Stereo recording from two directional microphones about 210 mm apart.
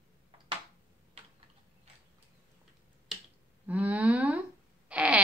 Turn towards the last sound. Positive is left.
turn(degrees=-5)  # may be behind; listen again after turning